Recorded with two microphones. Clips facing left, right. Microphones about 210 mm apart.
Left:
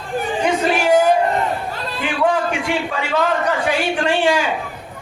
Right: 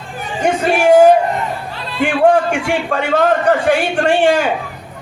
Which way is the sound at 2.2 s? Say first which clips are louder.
Right 5 dB; 50° right (ahead or behind).